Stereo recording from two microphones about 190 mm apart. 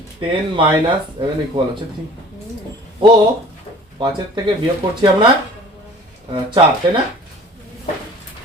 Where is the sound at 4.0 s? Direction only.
25° right (ahead or behind).